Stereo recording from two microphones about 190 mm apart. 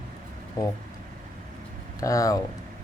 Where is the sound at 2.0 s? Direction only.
15° left (ahead or behind).